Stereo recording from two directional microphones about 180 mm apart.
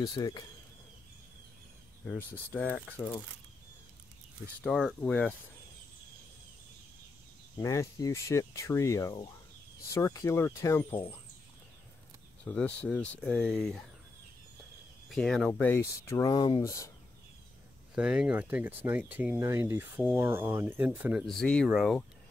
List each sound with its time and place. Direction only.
0.0 s speech: 20° left (ahead or behind)
2.0 s speech: 10° left (ahead or behind)
4.6 s speech: centre (ahead or behind)
7.5 s speech: 15° left (ahead or behind)
12.4 s speech: 5° left (ahead or behind)
15.0 s speech: centre (ahead or behind)
16.3 s speech: 25° left (ahead or behind)
17.9 s speech: 5° right (ahead or behind)
21.4 s speech: 5° left (ahead or behind)